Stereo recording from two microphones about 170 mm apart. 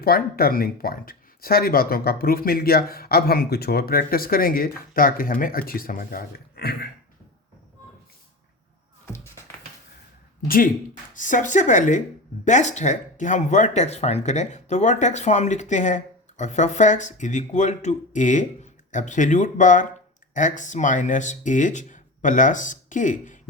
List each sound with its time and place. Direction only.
0.0 s speech: 60° left (ahead or behind)
9.1 s music: 15° left (ahead or behind)
11.1 s speech: 50° left (ahead or behind)